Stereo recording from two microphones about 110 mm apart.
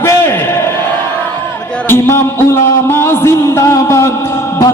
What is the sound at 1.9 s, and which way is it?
A man's voice, 20° left (ahead or behind).